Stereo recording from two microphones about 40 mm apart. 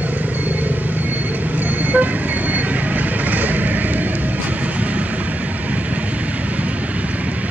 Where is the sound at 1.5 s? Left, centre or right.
Right.